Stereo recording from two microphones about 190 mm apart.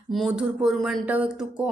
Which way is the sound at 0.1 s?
5° right (ahead or behind).